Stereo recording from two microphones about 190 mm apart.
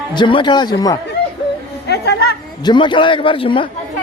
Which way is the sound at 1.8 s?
60° left (ahead or behind).